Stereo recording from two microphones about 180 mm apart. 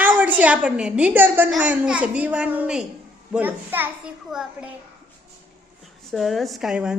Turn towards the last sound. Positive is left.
turn(degrees=-5)  # may be behind; listen again after turning